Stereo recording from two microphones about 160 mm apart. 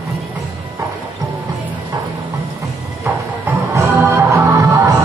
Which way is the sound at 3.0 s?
15° right (ahead or behind).